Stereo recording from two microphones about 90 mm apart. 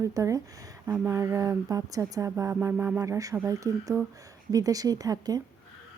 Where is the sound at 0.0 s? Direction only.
35° right (ahead or behind).